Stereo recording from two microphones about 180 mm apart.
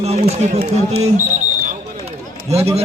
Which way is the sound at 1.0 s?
40° right (ahead or behind).